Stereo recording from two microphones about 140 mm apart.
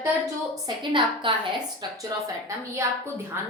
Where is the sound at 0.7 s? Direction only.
35° right (ahead or behind).